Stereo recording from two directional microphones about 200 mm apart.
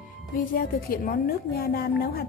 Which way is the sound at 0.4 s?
45° left (ahead or behind).